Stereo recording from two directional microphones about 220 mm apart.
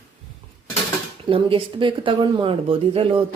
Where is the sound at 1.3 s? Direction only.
25° right (ahead or behind).